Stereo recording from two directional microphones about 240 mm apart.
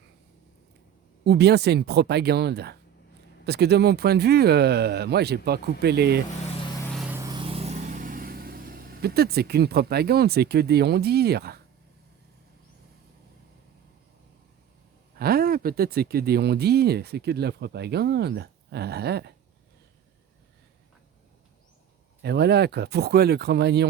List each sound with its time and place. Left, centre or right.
1.2 s speech: right
6.9 s vehicle: centre
7.2 s vehicle: centre; by 11.6 s right
15.2 s speech: right
22.2 s speech: right